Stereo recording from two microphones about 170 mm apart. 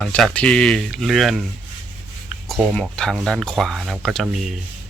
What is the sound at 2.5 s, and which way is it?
Speech, centre (ahead or behind).